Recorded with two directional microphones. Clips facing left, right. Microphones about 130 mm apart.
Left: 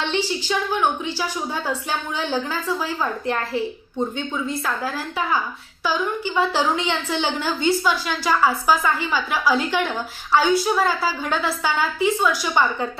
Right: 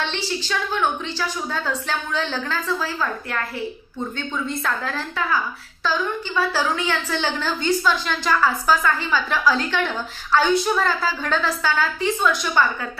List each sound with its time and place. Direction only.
0.0 s a woman's voice: 15° left (ahead or behind)
4.5 s a woman's voice: 5° left (ahead or behind)